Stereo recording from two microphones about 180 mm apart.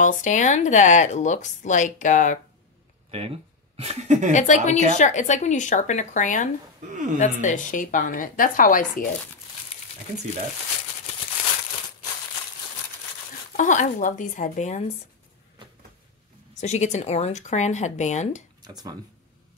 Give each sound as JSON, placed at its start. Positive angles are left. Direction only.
{"t": 0.0, "sound": "speech", "side_deg": 45}
{"t": 3.1, "sound": "speech", "side_deg": -35}
{"t": 4.3, "sound": "speech", "side_deg": 40}
{"t": 6.9, "sound": "a woman's voice", "side_deg": -45}
{"t": 7.2, "sound": "speech", "side_deg": 45}
{"t": 13.6, "sound": "speech", "side_deg": 45}
{"t": 15.6, "sound": "cupboard open or close", "side_deg": -25}
{"t": 16.5, "sound": "speech", "side_deg": 40}
{"t": 18.6, "sound": "speech", "side_deg": -20}